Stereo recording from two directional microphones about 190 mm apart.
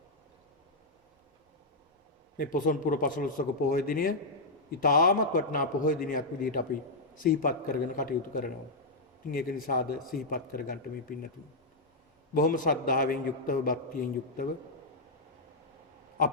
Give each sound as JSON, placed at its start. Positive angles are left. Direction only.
{"t": 2.4, "sound": "a man's voice", "side_deg": 45}
{"t": 12.3, "sound": "a man's voice", "side_deg": 45}